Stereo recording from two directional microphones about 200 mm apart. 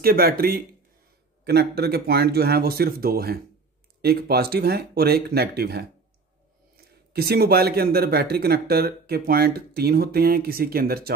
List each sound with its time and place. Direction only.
0.0 s speech: 50° right (ahead or behind)
7.1 s speech: 55° right (ahead or behind)